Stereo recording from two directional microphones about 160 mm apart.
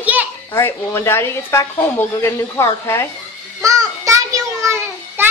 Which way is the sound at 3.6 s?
20° right (ahead or behind).